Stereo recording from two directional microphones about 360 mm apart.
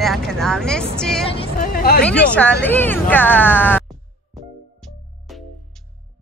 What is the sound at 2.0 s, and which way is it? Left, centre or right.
Speech, centre.